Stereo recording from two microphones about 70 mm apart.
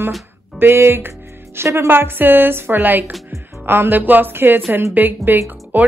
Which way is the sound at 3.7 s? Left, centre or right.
Right.